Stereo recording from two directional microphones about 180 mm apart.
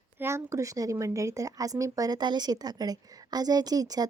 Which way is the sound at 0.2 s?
15° right (ahead or behind).